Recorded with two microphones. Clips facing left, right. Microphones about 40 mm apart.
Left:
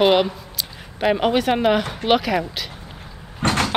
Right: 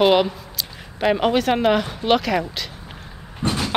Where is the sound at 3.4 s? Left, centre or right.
Left.